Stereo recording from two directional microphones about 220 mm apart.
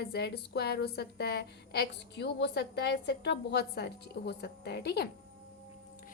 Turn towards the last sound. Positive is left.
turn(degrees=45)  # may be behind; listen again after turning